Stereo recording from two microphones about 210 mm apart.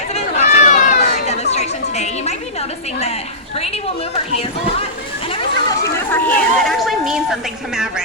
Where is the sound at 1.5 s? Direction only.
30° left (ahead or behind).